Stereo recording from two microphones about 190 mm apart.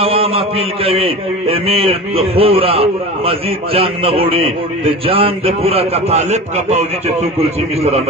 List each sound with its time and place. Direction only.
0.0 s a man's voice: 30° right (ahead or behind)